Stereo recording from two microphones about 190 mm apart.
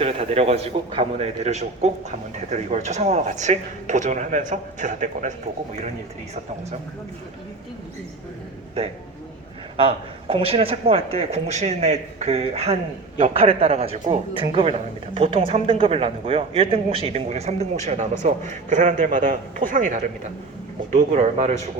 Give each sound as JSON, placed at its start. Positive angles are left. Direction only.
{"t": 0.0, "sound": "a man's voice", "side_deg": -30}
{"t": 9.7, "sound": "a man's voice", "side_deg": -30}